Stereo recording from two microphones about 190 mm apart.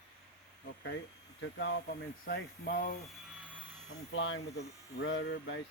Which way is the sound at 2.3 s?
50° left (ahead or behind).